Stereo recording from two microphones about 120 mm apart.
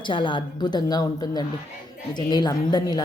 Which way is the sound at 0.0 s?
45° left (ahead or behind).